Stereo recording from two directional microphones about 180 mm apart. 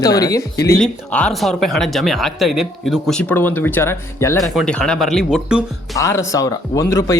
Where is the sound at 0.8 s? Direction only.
5° left (ahead or behind).